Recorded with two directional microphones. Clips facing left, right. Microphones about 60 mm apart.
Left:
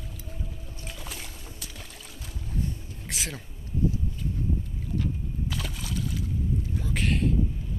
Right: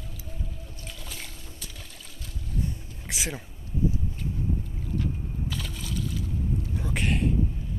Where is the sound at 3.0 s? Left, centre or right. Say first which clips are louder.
Right 2 dB; centre.